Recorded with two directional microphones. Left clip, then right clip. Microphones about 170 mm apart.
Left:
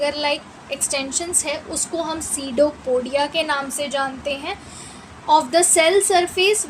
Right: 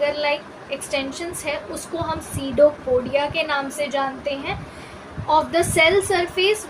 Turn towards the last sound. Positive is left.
turn(degrees=50)  # may be behind; listen again after turning